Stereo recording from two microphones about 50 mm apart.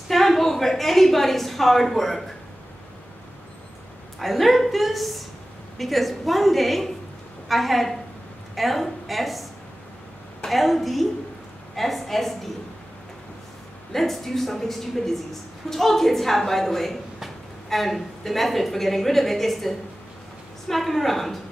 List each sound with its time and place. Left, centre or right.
0.1 s a woman's voice: centre
4.2 s a woman's voice: centre
13.9 s a woman's voice: centre